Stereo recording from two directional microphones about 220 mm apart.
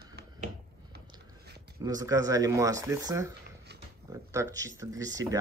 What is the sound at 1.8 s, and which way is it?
Speech, 15° right (ahead or behind).